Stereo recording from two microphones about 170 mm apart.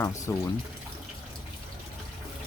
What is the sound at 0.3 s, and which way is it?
Speech, 15° left (ahead or behind).